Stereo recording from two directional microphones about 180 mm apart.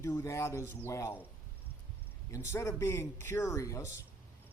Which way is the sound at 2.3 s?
15° left (ahead or behind).